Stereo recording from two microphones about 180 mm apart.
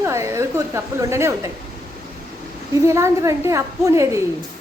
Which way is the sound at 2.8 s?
15° right (ahead or behind).